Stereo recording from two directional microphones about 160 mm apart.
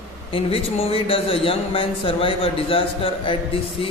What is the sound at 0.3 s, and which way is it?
A man's voice, 35° left (ahead or behind).